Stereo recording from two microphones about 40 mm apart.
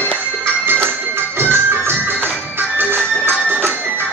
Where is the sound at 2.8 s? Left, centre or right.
Right.